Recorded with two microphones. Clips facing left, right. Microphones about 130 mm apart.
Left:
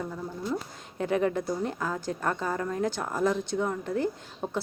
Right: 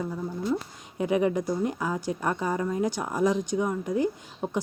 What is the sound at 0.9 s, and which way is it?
A woman's voice, 10° right (ahead or behind).